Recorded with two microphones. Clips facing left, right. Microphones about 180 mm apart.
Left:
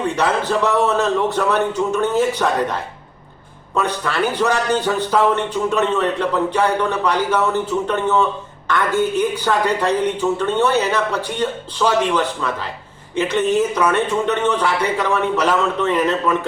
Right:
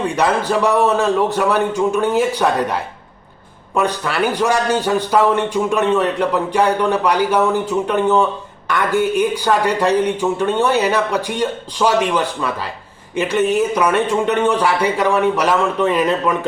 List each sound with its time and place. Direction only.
0.2 s speech: 10° right (ahead or behind)